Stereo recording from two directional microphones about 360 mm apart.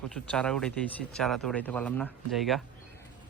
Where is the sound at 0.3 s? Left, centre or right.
Centre.